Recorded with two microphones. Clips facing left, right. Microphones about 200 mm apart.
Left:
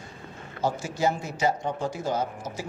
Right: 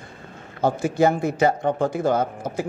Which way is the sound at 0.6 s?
55° right (ahead or behind).